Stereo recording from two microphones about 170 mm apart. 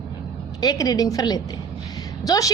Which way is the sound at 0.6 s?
25° left (ahead or behind).